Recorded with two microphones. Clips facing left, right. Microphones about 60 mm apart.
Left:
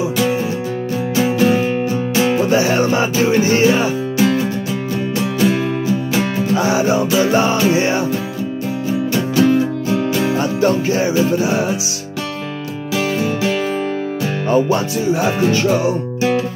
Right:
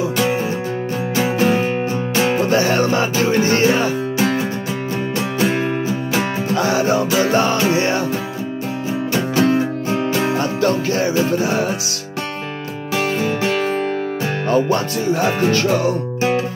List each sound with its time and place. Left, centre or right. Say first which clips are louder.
1.2 s music: left 2 dB; right
2.5 s music: left 1 dB; centre
5.2 s music: left 3 dB; right
6.5 s music: left 1 dB; centre
7.1 s music: left 2 dB; right
7.3 s music: left 2 dB; centre
9.1 s music: left 2 dB; right
10.4 s music: left 2 dB; centre
12.9 s music: left 1 dB; right
14.5 s speech: left 2 dB; centre